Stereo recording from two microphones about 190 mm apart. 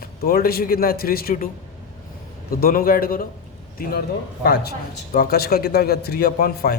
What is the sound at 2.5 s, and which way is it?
Speech, 50° left (ahead or behind).